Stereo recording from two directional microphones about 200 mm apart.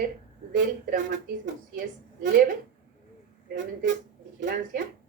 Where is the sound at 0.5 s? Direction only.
40° right (ahead or behind).